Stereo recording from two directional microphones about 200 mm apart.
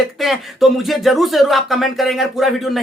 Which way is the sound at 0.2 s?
Centre (ahead or behind).